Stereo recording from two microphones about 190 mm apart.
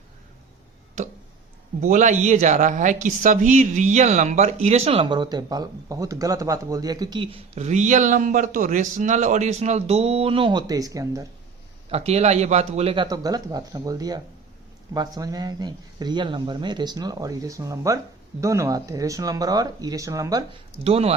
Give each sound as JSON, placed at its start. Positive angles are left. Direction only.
{"t": 1.8, "sound": "a man's voice", "side_deg": -40}
{"t": 11.9, "sound": "speech", "side_deg": -35}
{"t": 20.8, "sound": "a man's voice", "side_deg": -30}